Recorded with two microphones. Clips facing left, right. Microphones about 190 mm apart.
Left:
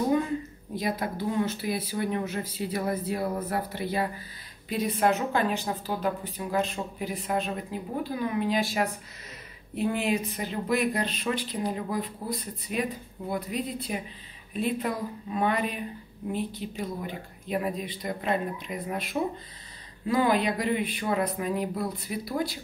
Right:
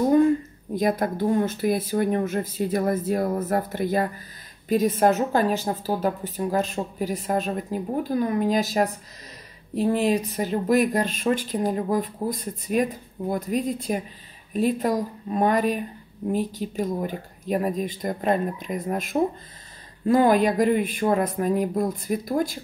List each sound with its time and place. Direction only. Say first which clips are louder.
0.7 s speech: right 7 dB; 50° right (ahead or behind)